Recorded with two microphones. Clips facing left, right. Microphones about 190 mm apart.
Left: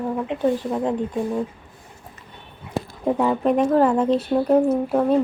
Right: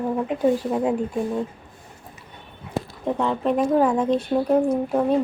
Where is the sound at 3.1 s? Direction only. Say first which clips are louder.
Left 3 dB; 10° left (ahead or behind).